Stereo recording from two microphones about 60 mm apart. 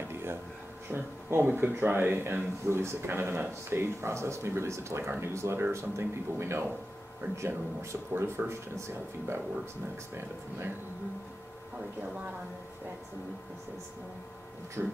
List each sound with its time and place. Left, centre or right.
0.1 s a sound: right
0.8 s speech: right
8.1 s speech: right
14.8 s speech: right